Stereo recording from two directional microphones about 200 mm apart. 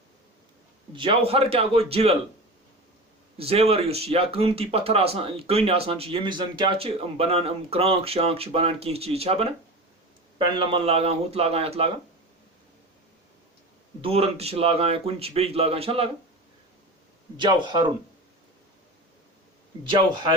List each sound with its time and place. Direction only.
0.9 s speech: 25° right (ahead or behind)
3.3 s speech: 30° right (ahead or behind)
14.0 s speech: 30° right (ahead or behind)
17.3 s speech: 25° right (ahead or behind)